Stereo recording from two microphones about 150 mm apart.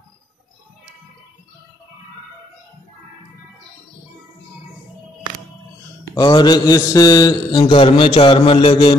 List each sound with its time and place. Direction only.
6.1 s mantra: 30° left (ahead or behind)